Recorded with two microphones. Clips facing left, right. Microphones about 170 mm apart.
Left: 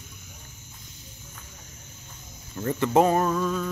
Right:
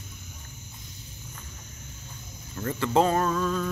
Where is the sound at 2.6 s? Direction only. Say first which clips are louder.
Left 3 dB; 15° left (ahead or behind).